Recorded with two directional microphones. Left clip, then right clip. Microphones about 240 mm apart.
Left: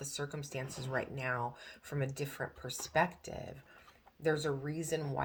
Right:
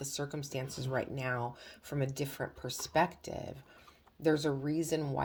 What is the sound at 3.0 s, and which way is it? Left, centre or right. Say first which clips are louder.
Speech: right 2 dB; right.